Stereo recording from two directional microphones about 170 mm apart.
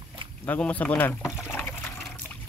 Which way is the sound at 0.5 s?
10° left (ahead or behind).